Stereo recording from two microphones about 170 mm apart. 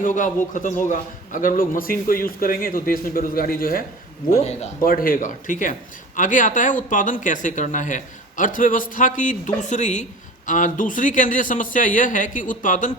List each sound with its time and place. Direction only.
0.0 s a man's voice: 50° left (ahead or behind)
4.3 s speech: 40° left (ahead or behind)
4.8 s a man's voice: 55° left (ahead or behind)